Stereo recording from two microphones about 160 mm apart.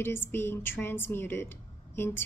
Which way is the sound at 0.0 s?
15° left (ahead or behind).